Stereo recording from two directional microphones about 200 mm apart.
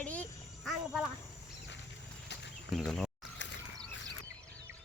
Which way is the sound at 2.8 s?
Centre (ahead or behind).